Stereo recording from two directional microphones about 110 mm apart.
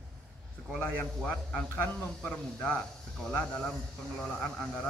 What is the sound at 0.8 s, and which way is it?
A man's voice, 5° left (ahead or behind).